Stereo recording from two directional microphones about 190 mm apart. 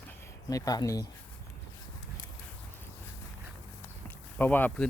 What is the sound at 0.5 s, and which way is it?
Speech, 20° left (ahead or behind).